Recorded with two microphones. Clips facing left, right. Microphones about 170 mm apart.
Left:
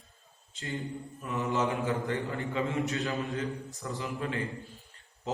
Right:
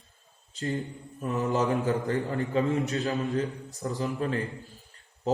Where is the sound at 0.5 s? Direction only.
40° right (ahead or behind).